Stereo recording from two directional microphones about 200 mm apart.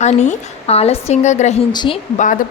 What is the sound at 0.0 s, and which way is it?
A woman's voice, 35° left (ahead or behind).